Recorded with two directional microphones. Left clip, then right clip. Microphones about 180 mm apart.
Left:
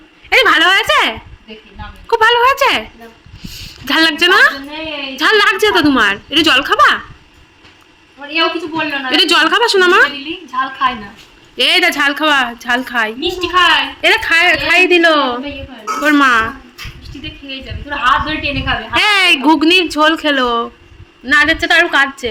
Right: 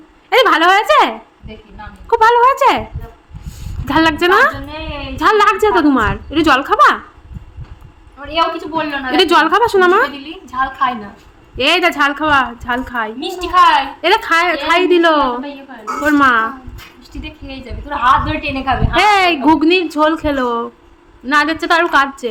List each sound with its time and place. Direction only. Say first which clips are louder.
0.3 s speech: left 1 dB; 15° right (ahead or behind)
2.2 s a woman's voice: right 1 dB; 15° right (ahead or behind)
3.4 s a sound: left 2 dB; 20° right (ahead or behind)
5.1 s a woman's voice: even; 10° right (ahead or behind)
8.3 s a woman's voice: left 1 dB; 45° right (ahead or behind)
9.1 s a woman's voice: even; 15° right (ahead or behind)
10.5 s a woman's voice: even; 55° right (ahead or behind)
11.5 s a woman's voice: left 1 dB; 5° right (ahead or behind)
13.1 s a woman's voice: right 4 dB; 80° right
14.0 s a woman's voice: left 4 dB; 15° right (ahead or behind)
17.2 s a woman's voice: left 4 dB; 80° right
18.9 s a woman's voice: left 1 dB; 10° right (ahead or behind)